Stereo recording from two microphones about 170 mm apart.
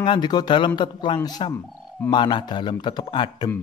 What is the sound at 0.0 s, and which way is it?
Speech, 25° left (ahead or behind).